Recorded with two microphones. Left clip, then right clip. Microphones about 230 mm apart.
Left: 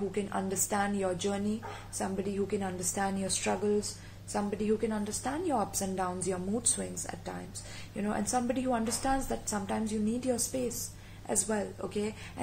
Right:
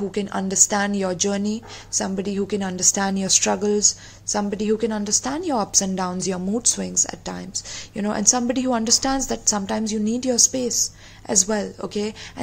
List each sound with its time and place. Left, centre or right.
0.1 s a woman's voice: right
7.9 s a woman's voice: right